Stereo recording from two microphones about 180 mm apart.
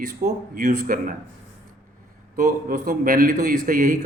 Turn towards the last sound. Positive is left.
turn(degrees=-50)  # may be behind; listen again after turning